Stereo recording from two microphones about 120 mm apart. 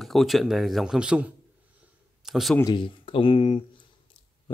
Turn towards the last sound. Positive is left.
turn(degrees=50)  # may be behind; listen again after turning